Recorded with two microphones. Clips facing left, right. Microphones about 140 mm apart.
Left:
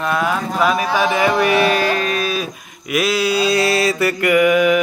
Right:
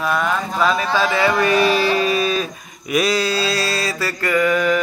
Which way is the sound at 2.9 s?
5° left (ahead or behind).